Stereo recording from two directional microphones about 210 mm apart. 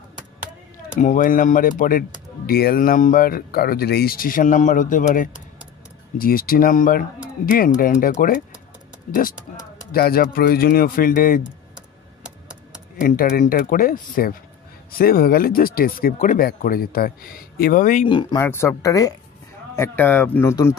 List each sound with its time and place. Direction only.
0.9 s speech: 40° left (ahead or behind)
9.9 s speech: 45° left (ahead or behind)
11.4 s computer keyboard: 5° right (ahead or behind)
13.0 s speech: 40° left (ahead or behind)
18.0 s speech: 20° left (ahead or behind)
18.4 s speech: 10° left (ahead or behind)